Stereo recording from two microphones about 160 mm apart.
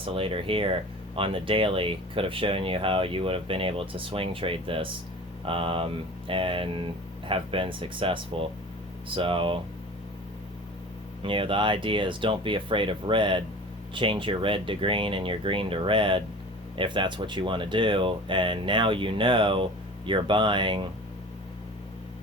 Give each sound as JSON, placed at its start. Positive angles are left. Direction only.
{"t": 0.0, "sound": "speech", "side_deg": -35}
{"t": 11.2, "sound": "speech", "side_deg": -30}